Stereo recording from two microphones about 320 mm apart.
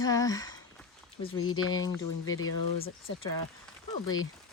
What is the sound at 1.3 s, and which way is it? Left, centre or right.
Speech, left.